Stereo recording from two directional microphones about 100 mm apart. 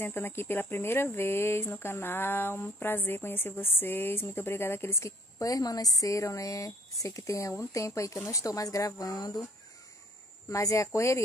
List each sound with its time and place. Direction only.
0.0 s speech: 20° left (ahead or behind); by 9.4 s 40° left (ahead or behind)
10.5 s speech: 30° left (ahead or behind)